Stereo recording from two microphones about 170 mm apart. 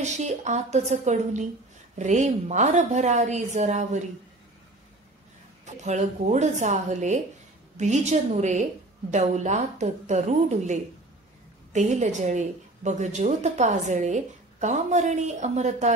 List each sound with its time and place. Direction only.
0.0 s a woman's voice: 45° right (ahead or behind)
5.7 s a woman's voice: 45° right (ahead or behind)